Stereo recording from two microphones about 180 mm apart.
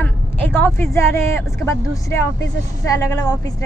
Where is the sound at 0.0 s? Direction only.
10° left (ahead or behind).